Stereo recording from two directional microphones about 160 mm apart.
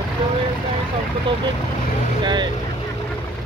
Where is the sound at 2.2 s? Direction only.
30° right (ahead or behind).